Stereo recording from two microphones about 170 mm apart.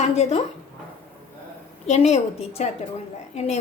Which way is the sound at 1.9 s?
40° left (ahead or behind).